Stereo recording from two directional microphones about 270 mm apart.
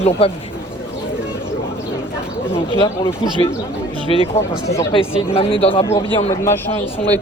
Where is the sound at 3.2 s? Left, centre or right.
Centre.